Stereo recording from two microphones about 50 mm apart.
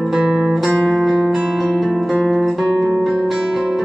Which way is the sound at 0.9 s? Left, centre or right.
Centre.